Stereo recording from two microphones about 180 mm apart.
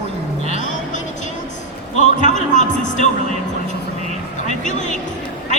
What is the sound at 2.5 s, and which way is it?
Music, 40° left (ahead or behind).